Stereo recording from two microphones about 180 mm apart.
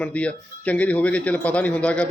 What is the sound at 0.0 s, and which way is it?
A man's voice, 5° left (ahead or behind).